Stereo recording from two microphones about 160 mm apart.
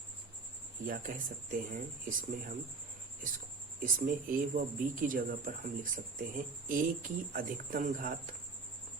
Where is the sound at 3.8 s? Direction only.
60° right (ahead or behind).